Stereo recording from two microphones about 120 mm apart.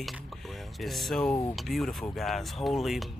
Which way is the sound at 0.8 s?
Centre (ahead or behind).